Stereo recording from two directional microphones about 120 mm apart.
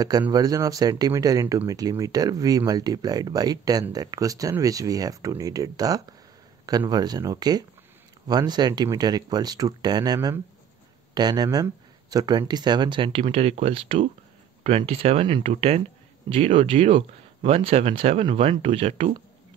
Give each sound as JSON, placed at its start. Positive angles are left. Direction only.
{"t": 0.3, "sound": "speech", "side_deg": -30}
{"t": 13.2, "sound": "speech", "side_deg": -55}